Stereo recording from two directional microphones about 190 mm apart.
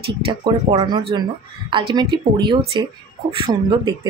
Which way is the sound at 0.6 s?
25° right (ahead or behind).